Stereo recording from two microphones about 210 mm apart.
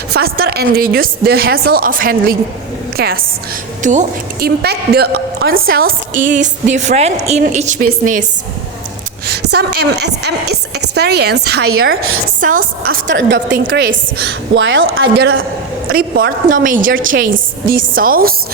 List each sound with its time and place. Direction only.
0.1 s a woman's voice: 50° right (ahead or behind)
9.2 s a woman's voice: 50° right (ahead or behind)
11.6 s a woman's voice: 90° right
12.4 s a woman's voice: 40° right (ahead or behind)
13.1 s a man's voice: 60° right (ahead or behind); by 18.3 s 45° right (ahead or behind)